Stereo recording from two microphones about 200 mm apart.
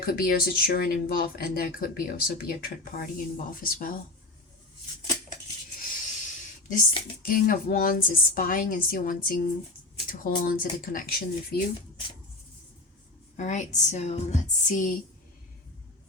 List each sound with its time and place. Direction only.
0.0 s speech: 50° left (ahead or behind)
5.8 s a sound: 40° left (ahead or behind)
7.4 s speech: 45° left (ahead or behind)
13.3 s a woman's voice: 35° left (ahead or behind)